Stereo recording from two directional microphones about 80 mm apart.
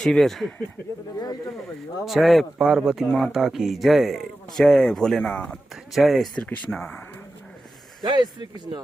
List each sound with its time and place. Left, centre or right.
0.0 s speech: centre
2.0 s speech: centre
5.9 s speech: centre
6.3 s speech: centre
8.0 s speech: right